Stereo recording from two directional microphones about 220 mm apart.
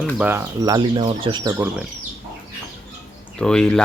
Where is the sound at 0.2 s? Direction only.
10° right (ahead or behind).